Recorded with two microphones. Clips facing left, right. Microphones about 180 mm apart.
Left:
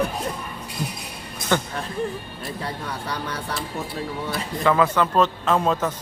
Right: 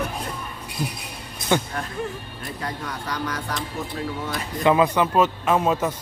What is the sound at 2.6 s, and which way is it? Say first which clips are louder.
Speech: right 1 dB; 30° left (ahead or behind).